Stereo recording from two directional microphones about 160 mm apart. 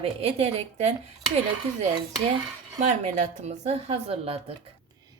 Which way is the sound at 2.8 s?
45° right (ahead or behind).